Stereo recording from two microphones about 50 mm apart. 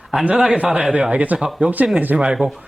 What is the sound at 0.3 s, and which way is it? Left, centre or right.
A man's voice, right.